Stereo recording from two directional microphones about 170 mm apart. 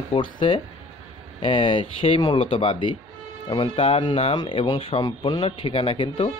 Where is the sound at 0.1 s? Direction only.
30° left (ahead or behind).